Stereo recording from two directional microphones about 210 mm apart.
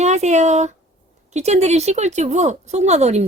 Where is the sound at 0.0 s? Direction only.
35° right (ahead or behind).